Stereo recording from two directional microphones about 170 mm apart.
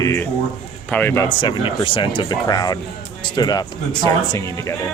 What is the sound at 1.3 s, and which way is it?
Speech, 25° left (ahead or behind).